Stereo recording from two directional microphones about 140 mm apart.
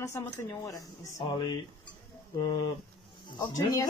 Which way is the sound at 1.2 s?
35° left (ahead or behind).